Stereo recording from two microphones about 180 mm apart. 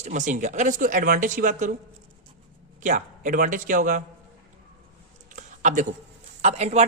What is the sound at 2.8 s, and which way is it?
Speech, 45° right (ahead or behind).